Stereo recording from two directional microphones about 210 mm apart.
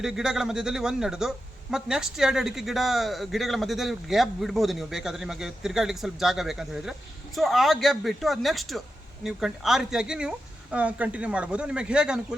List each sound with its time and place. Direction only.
0.0 s speech: centre (ahead or behind)